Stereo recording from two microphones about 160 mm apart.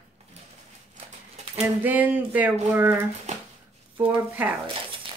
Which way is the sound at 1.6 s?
10° right (ahead or behind).